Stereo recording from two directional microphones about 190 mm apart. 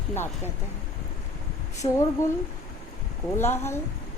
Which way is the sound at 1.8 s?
25° left (ahead or behind).